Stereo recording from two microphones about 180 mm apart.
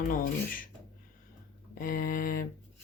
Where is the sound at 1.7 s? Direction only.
55° left (ahead or behind).